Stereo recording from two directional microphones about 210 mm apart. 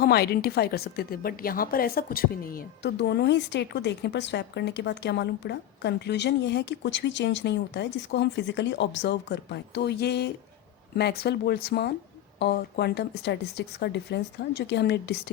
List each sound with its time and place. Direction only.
0.0 s a woman's voice: 50° left (ahead or behind)